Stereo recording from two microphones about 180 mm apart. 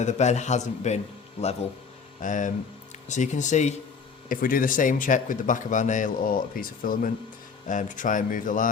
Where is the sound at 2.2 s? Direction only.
45° left (ahead or behind).